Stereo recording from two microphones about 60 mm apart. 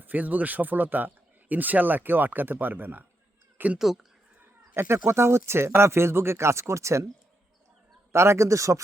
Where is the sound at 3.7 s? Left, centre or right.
Centre.